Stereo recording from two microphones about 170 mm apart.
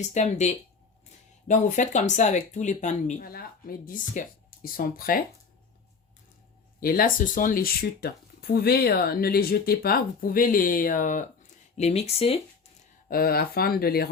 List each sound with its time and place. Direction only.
0.0 s speech: 45° left (ahead or behind)
3.2 s speech: 60° left (ahead or behind)
6.7 s speech: 60° left (ahead or behind)
11.8 s speech: 40° left (ahead or behind)
13.1 s speech: 60° left (ahead or behind)